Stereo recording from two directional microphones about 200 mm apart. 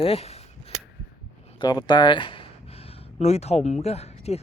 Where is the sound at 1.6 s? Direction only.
20° left (ahead or behind).